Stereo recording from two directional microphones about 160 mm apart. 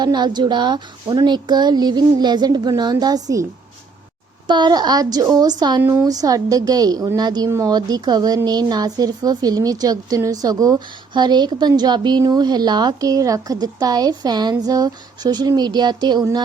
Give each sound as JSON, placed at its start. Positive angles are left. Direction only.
{"t": 0.0, "sound": "a woman's voice", "side_deg": -25}
{"t": 4.4, "sound": "a woman's voice", "side_deg": -30}
{"t": 5.8, "sound": "a woman's voice", "side_deg": -15}